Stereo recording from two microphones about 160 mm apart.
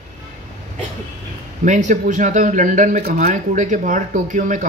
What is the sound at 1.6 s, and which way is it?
Speech, 50° right (ahead or behind).